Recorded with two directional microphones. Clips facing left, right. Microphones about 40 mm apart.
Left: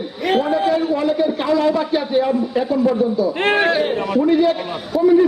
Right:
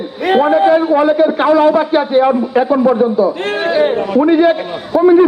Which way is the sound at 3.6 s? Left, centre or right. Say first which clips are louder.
Right 4 dB; centre.